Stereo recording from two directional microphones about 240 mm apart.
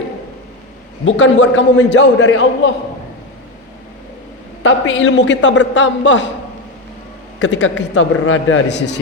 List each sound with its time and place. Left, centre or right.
1.0 s a man's voice: left
4.6 s a man's voice: left
7.3 s a man's voice: left